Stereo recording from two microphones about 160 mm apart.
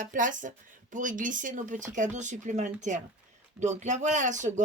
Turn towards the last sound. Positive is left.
turn(degrees=-50)  # may be behind; listen again after turning